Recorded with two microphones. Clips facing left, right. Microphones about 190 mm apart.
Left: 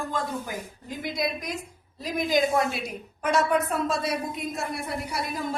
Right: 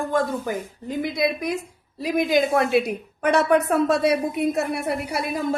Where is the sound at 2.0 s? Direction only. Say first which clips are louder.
Right 4 dB; 65° right (ahead or behind).